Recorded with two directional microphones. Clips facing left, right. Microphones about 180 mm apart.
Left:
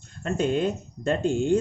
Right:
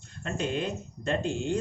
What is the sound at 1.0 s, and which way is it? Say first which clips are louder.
Speech: left 6 dB; 50° left (ahead or behind).